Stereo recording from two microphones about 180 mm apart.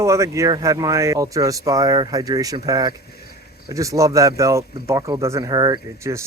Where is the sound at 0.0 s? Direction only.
15° right (ahead or behind).